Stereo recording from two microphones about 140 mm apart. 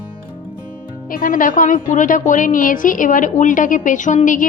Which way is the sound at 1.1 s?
90° left.